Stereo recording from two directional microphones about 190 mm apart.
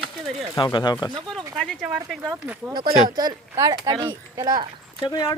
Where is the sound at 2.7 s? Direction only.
20° right (ahead or behind).